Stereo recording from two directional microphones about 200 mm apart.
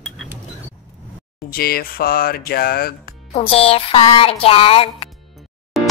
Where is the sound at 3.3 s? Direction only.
30° left (ahead or behind).